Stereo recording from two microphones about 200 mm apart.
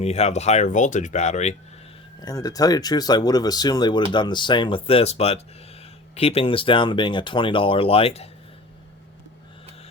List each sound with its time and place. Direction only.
0.0 s speech: 35° left (ahead or behind)
2.2 s speech: 20° left (ahead or behind)